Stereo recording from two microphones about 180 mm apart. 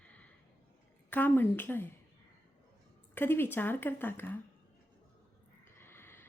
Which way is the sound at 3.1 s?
10° left (ahead or behind).